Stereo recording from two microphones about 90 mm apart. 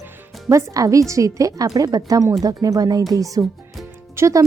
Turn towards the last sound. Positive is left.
turn(degrees=-35)  # may be behind; listen again after turning